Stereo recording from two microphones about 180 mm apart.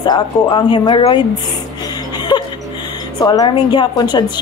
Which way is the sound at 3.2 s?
20° left (ahead or behind).